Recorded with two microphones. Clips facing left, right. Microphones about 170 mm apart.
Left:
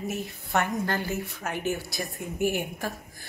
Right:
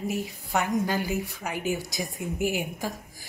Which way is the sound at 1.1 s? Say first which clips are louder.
Right 2 dB; centre (ahead or behind).